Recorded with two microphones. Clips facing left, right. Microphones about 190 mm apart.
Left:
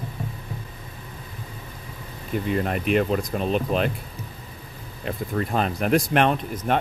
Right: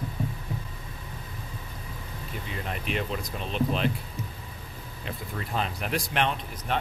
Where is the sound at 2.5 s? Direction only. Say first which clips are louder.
Left 10 dB; 55° left (ahead or behind).